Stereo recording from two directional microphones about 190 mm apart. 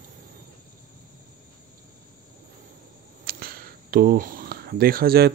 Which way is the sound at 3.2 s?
50° right (ahead or behind).